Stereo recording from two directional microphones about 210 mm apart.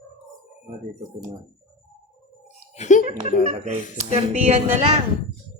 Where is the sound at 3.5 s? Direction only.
30° right (ahead or behind).